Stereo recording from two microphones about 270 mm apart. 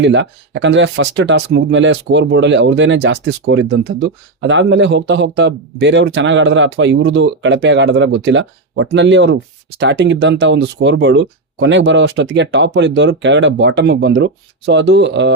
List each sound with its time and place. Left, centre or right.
0.0 s speech: right